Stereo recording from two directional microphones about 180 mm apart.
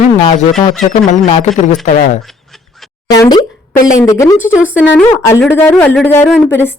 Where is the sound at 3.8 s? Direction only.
20° left (ahead or behind).